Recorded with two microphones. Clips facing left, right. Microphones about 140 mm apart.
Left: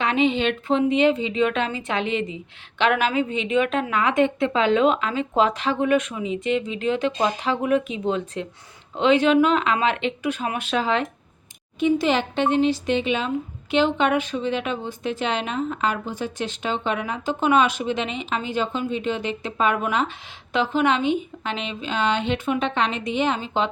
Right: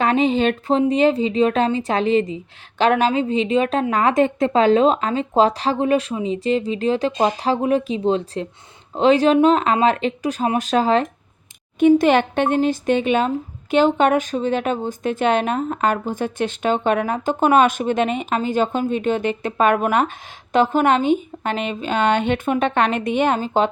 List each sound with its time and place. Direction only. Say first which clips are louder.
0.0 s a woman's voice: right 4 dB; 40° right (ahead or behind)
11.8 s speech: right 7 dB; 55° right (ahead or behind)